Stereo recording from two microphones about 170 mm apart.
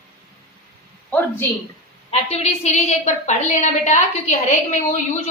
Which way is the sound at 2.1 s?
40° left (ahead or behind).